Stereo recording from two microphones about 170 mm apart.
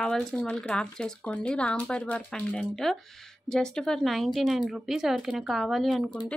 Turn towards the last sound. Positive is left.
turn(degrees=0)  # may be behind; listen again after turning